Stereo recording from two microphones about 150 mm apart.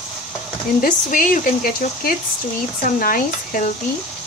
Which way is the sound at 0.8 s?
65° left (ahead or behind).